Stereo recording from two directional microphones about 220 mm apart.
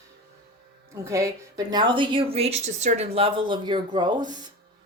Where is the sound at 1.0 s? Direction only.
15° right (ahead or behind).